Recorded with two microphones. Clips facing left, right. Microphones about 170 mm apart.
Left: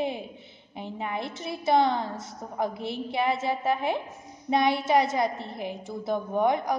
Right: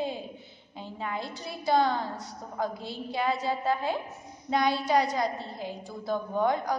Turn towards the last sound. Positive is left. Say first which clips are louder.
# left 2 dB
turn(degrees=20)  # may be behind; listen again after turning